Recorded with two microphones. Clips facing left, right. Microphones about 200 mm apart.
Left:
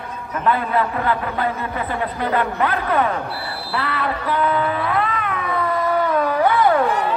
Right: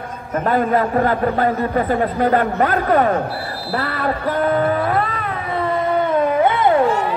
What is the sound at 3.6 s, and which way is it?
Cat, 45° right (ahead or behind).